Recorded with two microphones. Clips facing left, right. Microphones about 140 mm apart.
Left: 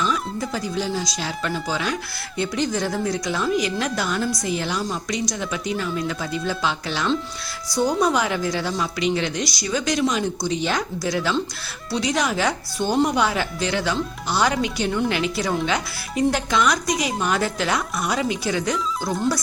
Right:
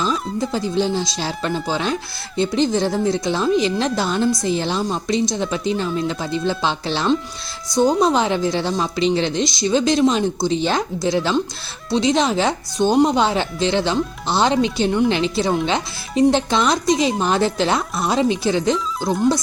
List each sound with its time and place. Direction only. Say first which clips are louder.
0.3 s speech: right 5 dB; 25° right (ahead or behind)